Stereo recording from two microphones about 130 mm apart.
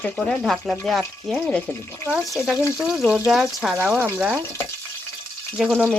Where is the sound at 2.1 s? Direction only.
Centre (ahead or behind).